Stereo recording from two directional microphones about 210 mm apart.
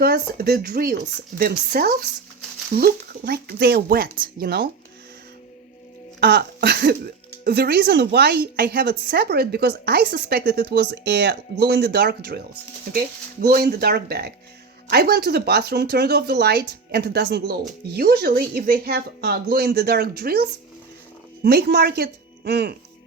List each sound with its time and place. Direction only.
0.0 s speech: 50° right (ahead or behind)
6.1 s speech: 55° right (ahead or behind)
13.5 s a woman's voice: 45° right (ahead or behind)